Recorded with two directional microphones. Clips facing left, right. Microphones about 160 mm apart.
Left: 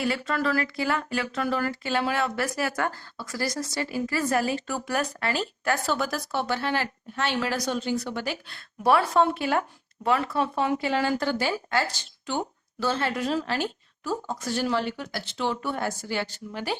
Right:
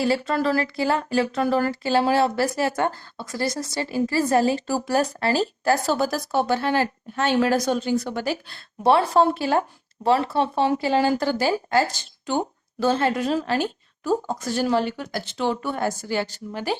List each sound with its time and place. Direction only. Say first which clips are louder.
0.0 s a woman's voice: right 5 dB; 30° right (ahead or behind)